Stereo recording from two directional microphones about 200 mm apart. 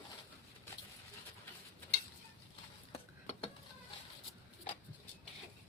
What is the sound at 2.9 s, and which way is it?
Stir, 30° left (ahead or behind).